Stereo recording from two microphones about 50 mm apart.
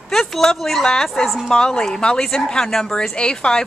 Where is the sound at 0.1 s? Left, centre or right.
Centre.